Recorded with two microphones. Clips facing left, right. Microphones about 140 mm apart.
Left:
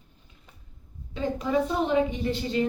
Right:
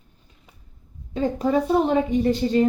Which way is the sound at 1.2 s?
40° right (ahead or behind).